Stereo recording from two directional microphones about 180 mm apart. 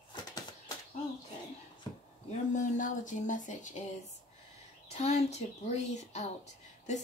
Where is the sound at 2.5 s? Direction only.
45° left (ahead or behind).